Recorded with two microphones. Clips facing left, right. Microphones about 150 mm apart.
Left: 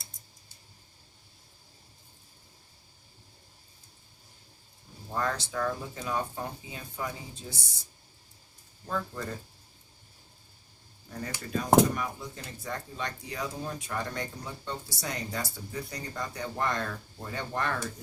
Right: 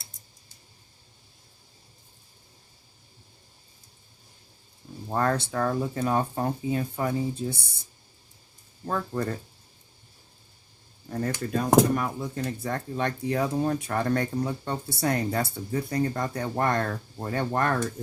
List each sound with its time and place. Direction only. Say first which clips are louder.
5.1 s speech: right 6 dB; 55° right (ahead or behind)
8.9 s speech: right 6 dB; 55° right (ahead or behind)
11.1 s speech: right 6 dB; 55° right (ahead or behind)